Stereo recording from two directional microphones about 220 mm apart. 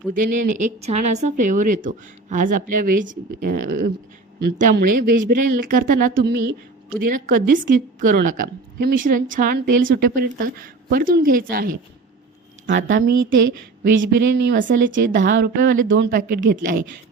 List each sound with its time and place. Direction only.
0.1 s a woman's voice: 35° right (ahead or behind)
12.6 s speech: 55° right (ahead or behind)
16.0 s a woman's voice: 40° right (ahead or behind)